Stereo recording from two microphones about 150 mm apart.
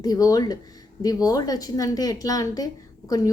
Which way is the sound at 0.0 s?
25° left (ahead or behind).